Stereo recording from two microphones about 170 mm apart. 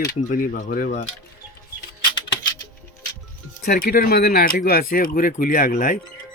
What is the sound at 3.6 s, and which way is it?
Speech, 60° left (ahead or behind).